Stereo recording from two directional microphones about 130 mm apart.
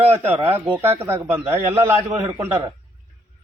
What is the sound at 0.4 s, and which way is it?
Speech, 15° right (ahead or behind).